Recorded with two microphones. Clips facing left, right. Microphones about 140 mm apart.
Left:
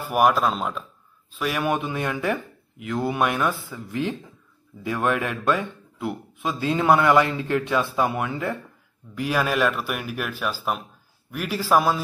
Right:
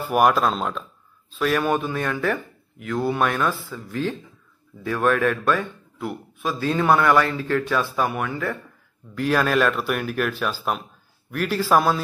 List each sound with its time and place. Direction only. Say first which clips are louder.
0.1 s speech: right 1 dB; 5° left (ahead or behind); by 8.5 s 20° left (ahead or behind)
9.1 s speech: right 3 dB; 10° left (ahead or behind)